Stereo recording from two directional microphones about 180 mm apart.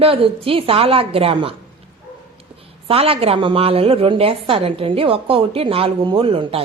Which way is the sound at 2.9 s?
30° right (ahead or behind).